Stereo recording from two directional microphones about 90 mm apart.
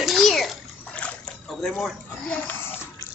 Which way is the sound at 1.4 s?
5° left (ahead or behind).